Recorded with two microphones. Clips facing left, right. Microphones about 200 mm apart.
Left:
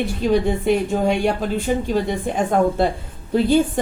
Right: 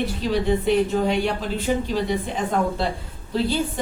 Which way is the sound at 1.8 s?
50° left (ahead or behind).